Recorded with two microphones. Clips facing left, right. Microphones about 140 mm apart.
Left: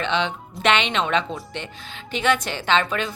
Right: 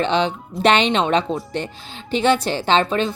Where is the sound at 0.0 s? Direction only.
35° right (ahead or behind).